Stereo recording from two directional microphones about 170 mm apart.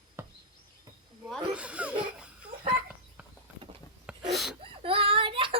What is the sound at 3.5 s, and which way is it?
Clip-clop, 10° right (ahead or behind).